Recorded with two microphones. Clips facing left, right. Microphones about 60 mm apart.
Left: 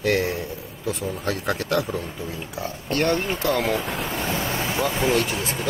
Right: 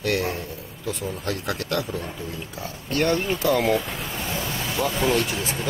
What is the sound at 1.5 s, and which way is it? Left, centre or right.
Speech, centre.